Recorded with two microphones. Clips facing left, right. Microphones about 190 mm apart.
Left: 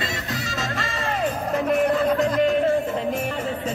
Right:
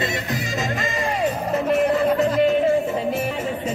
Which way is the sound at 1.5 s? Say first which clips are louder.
Right 1 dB; centre (ahead or behind).